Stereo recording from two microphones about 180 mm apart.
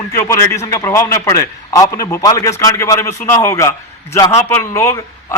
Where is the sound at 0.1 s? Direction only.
15° left (ahead or behind).